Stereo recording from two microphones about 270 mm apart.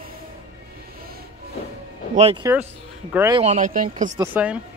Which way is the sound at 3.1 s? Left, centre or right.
Centre.